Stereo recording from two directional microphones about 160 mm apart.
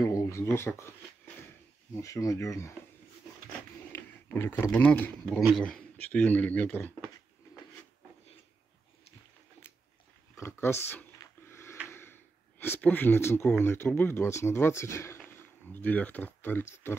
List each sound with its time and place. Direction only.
0.0 s speech: 20° left (ahead or behind)
3.9 s speech: 15° left (ahead or behind)
10.3 s a sound: 15° left (ahead or behind)
13.7 s speech: 15° left (ahead or behind)